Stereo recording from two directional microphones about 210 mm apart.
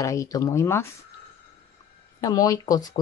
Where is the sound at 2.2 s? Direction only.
15° left (ahead or behind).